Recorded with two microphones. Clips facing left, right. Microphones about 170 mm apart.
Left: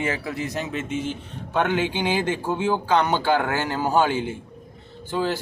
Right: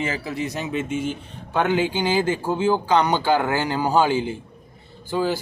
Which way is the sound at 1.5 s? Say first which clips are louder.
Right 2 dB; 5° right (ahead or behind).